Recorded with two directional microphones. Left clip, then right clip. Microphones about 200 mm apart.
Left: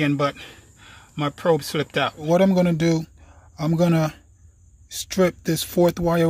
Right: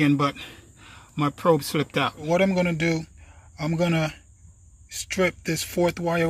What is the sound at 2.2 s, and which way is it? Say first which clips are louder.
Speech: left 4 dB; 25° left (ahead or behind).